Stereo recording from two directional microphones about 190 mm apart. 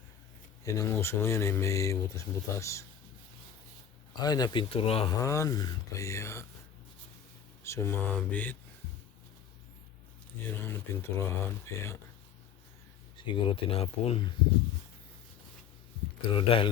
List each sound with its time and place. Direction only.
0.6 s speech: 15° left (ahead or behind)
4.1 s speech: 20° left (ahead or behind)
5.2 s speech: 15° left (ahead or behind)
7.6 s speech: 15° left (ahead or behind)
10.5 s speech: 10° left (ahead or behind)
13.1 s speech: 25° left (ahead or behind)
16.3 s speech: 25° left (ahead or behind)